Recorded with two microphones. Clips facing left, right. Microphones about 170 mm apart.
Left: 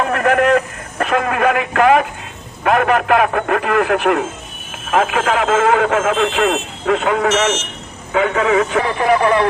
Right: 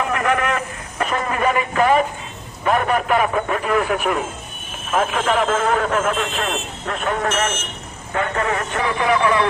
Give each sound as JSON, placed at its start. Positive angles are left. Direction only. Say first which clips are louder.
{"t": 0.0, "sound": "a man's voice", "louder": "left 5 dB", "side_deg": 60}
{"t": 9.0, "sound": "speech", "louder": "left 3 dB", "side_deg": 40}